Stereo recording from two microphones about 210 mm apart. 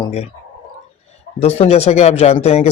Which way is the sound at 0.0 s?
30° left (ahead or behind).